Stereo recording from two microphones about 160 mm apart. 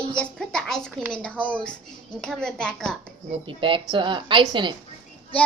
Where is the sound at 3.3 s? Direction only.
35° right (ahead or behind).